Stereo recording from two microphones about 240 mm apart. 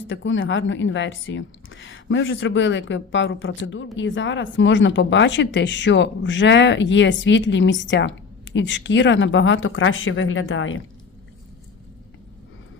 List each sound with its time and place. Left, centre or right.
0.1 s speech: left